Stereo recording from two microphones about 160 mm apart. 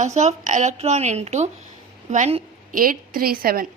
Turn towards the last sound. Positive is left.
turn(degrees=-65)  # may be behind; listen again after turning